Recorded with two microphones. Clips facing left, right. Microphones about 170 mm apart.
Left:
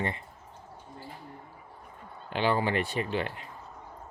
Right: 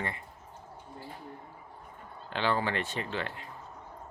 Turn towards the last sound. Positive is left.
turn(degrees=15)  # may be behind; listen again after turning